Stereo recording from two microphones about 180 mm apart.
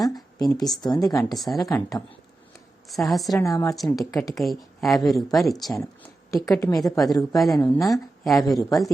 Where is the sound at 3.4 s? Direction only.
15° left (ahead or behind).